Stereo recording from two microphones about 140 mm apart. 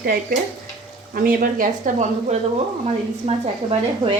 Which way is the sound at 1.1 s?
90° right.